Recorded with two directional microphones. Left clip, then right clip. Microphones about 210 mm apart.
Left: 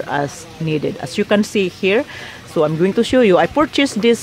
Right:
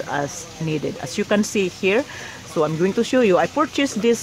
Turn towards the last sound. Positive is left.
turn(degrees=15)  # may be behind; listen again after turning